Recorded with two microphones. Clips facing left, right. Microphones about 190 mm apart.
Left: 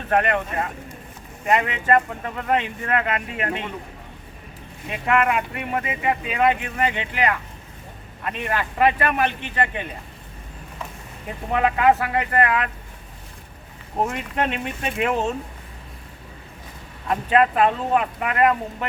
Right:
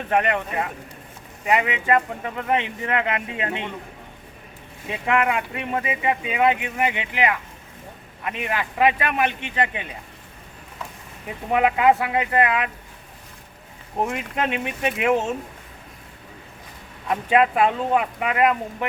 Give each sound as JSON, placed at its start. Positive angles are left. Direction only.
{"t": 0.1, "sound": "speech", "side_deg": -15}
{"t": 4.9, "sound": "speech", "side_deg": -15}
{"t": 11.5, "sound": "speech", "side_deg": -15}
{"t": 14.1, "sound": "speech", "side_deg": -15}
{"t": 17.1, "sound": "speech", "side_deg": -15}